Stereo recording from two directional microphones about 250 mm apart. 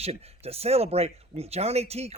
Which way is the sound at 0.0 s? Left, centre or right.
Right.